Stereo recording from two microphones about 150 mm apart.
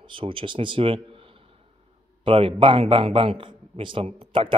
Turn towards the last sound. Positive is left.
turn(degrees=-35)  # may be behind; listen again after turning